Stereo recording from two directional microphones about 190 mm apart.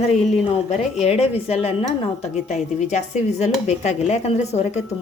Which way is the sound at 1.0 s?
30° left (ahead or behind).